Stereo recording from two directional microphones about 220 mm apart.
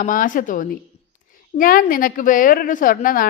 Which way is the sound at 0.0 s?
35° left (ahead or behind).